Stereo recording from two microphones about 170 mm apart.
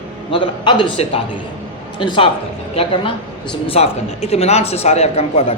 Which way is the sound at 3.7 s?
35° left (ahead or behind).